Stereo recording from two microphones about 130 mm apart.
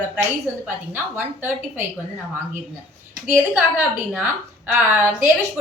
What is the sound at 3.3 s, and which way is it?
A woman's voice, 10° right (ahead or behind).